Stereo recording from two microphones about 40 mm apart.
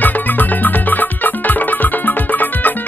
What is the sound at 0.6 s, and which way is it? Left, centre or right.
Music, left.